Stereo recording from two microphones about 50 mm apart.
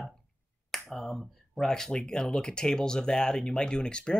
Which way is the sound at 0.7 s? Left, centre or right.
Centre.